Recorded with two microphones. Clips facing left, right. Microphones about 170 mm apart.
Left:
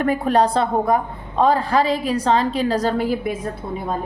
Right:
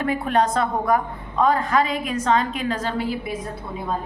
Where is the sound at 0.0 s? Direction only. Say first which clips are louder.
Left 3 dB; 40° left (ahead or behind).